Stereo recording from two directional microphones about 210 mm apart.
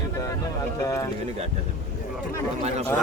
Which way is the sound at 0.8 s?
15° left (ahead or behind).